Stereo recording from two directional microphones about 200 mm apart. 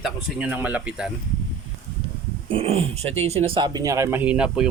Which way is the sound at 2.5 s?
30° right (ahead or behind).